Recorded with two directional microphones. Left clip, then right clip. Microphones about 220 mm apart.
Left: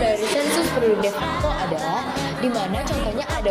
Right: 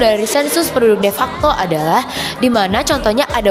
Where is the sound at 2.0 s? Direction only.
50° right (ahead or behind).